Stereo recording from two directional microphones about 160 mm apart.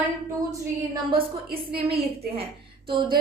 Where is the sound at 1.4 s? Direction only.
75° right (ahead or behind).